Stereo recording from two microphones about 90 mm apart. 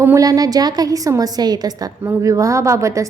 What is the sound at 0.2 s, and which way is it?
A woman's voice, 45° right (ahead or behind).